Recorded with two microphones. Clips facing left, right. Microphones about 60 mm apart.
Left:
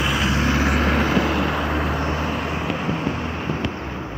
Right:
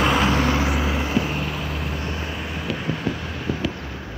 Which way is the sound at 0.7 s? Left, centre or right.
Left.